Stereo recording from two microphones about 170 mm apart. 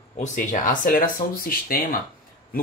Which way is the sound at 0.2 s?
50° left (ahead or behind).